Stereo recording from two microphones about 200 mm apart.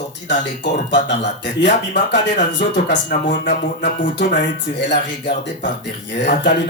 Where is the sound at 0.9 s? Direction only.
60° left (ahead or behind).